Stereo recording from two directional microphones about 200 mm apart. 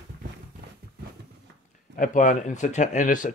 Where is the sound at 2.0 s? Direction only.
40° left (ahead or behind).